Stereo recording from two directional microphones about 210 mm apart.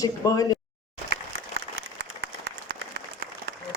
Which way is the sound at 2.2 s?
55° right (ahead or behind).